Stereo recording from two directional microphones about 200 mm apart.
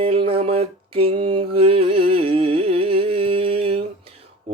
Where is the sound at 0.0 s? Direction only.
25° right (ahead or behind).